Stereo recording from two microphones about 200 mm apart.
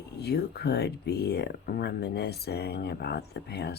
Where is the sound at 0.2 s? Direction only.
55° left (ahead or behind).